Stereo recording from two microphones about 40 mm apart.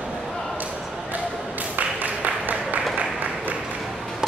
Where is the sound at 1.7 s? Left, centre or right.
Right.